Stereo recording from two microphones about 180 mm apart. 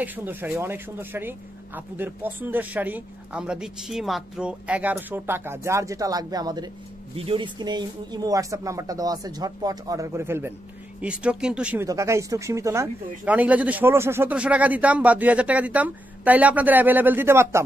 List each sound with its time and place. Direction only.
0.0 s speech: 10° right (ahead or behind)